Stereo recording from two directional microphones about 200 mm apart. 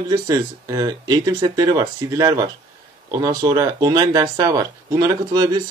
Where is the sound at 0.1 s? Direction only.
15° right (ahead or behind).